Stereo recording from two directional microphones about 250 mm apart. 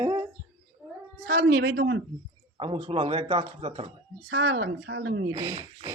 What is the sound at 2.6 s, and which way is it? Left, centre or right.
Speech, right.